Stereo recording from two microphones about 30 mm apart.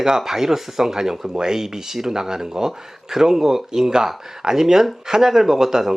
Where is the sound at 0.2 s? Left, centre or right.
Centre.